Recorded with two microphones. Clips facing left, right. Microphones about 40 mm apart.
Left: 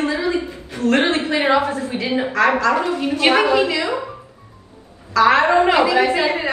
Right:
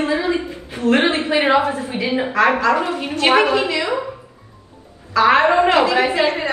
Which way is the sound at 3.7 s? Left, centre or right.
Right.